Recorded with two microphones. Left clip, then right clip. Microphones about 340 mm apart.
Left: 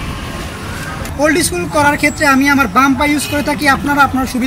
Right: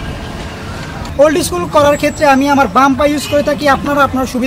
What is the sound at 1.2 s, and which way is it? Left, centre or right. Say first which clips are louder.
Speech: right 3 dB; centre.